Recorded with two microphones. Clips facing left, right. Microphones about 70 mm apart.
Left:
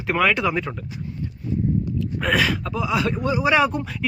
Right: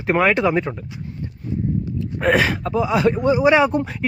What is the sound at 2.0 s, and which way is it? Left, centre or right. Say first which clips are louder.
Speech: right 5 dB; right.